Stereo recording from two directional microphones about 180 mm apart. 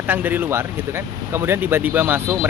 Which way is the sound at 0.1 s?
10° right (ahead or behind).